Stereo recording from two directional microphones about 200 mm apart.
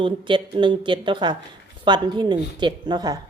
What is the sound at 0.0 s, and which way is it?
A woman's voice, 25° right (ahead or behind).